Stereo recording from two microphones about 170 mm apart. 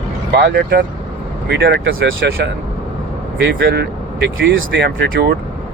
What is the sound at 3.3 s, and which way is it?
Speech, 65° right (ahead or behind).